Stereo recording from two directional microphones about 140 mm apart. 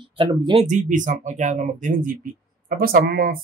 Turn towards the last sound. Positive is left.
turn(degrees=-90)